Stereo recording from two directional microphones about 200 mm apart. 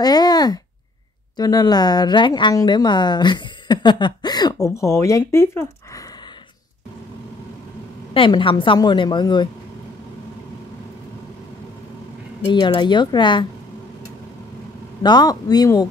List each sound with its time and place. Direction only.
0.0 s a sound: 20° left (ahead or behind)
1.3 s speech: 20° left (ahead or behind)
8.1 s speech: 25° left (ahead or behind)
12.4 s speech: 20° left (ahead or behind)
15.0 s speech: 20° left (ahead or behind)